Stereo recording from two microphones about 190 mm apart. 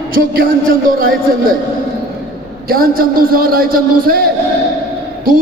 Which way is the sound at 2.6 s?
50° right (ahead or behind).